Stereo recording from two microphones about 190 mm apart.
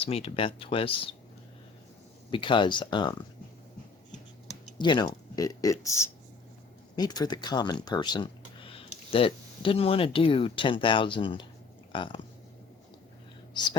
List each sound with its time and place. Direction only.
0.0 s speech: 30° left (ahead or behind)
2.3 s speech: 25° left (ahead or behind)
4.8 s speech: 25° left (ahead or behind)
13.5 s speech: 20° left (ahead or behind)